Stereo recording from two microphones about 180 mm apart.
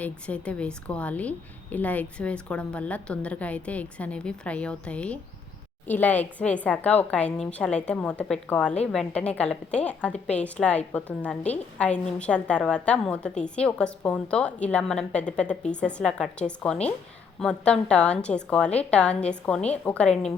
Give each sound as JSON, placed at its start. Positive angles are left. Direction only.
{"t": 0.0, "sound": "a woman's voice", "side_deg": 5}